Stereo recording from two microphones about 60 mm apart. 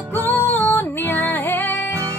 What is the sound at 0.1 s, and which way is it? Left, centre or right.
Music, left.